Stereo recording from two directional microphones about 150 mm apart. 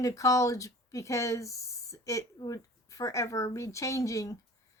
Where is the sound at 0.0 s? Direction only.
20° left (ahead or behind).